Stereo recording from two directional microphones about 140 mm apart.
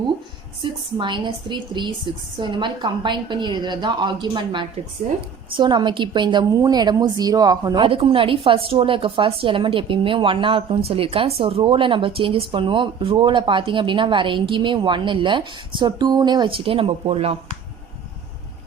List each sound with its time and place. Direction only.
0.6 s a woman's voice: 35° right (ahead or behind)